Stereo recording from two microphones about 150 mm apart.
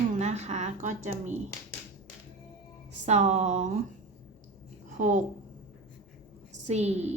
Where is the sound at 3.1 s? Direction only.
50° right (ahead or behind).